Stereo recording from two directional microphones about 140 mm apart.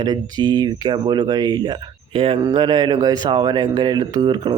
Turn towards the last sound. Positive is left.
turn(degrees=-30)  # may be behind; listen again after turning